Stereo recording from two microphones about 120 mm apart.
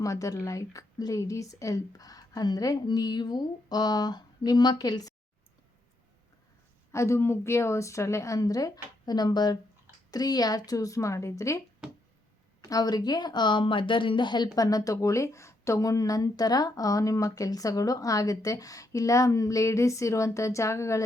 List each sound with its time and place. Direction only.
0.0 s speech: 25° left (ahead or behind)
6.9 s a woman's voice: 25° left (ahead or behind)
12.6 s a woman's voice: 30° left (ahead or behind)